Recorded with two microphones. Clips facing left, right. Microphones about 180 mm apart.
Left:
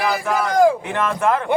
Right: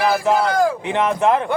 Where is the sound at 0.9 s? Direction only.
20° right (ahead or behind).